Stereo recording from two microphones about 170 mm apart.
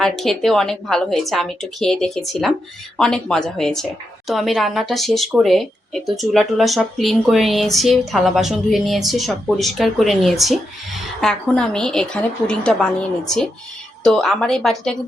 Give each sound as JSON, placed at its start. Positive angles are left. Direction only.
{"t": 0.0, "sound": "speech", "side_deg": 0}